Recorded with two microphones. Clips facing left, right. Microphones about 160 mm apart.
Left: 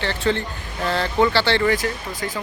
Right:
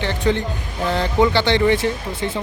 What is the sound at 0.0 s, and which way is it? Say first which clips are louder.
Speech: right 2 dB; 15° right (ahead or behind).